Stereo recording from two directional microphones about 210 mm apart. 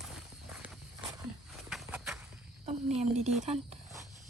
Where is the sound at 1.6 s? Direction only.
5° right (ahead or behind).